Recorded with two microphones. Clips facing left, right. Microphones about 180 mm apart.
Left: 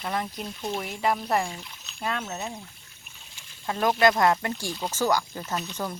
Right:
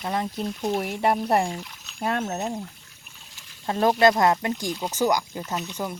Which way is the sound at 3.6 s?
30° right (ahead or behind).